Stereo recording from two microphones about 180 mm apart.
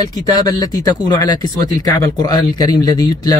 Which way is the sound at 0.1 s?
20° left (ahead or behind).